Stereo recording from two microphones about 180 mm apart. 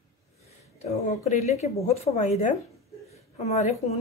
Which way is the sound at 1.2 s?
40° left (ahead or behind).